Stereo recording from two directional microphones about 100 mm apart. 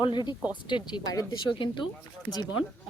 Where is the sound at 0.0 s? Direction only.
50° left (ahead or behind).